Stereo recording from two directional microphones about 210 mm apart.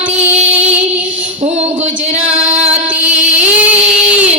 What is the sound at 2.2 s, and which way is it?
Singing, 30° right (ahead or behind).